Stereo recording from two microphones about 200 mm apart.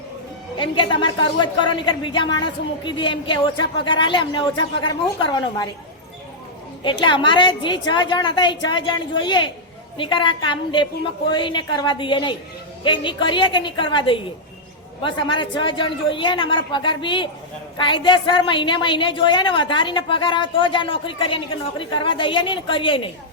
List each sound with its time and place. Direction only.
0.5 s a woman's voice: 25° left (ahead or behind)
6.8 s a woman's voice: 25° left (ahead or behind)